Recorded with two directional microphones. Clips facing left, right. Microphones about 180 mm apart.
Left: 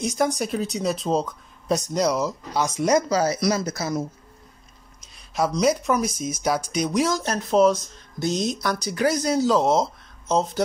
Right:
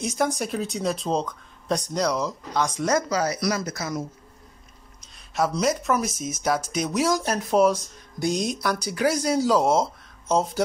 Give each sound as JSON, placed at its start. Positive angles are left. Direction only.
{"t": 0.0, "sound": "speech", "side_deg": 0}
{"t": 3.1, "sound": "speech", "side_deg": 30}
{"t": 5.1, "sound": "speech", "side_deg": 0}